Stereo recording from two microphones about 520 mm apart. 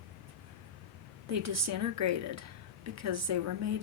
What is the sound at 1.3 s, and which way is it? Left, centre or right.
Speech, right.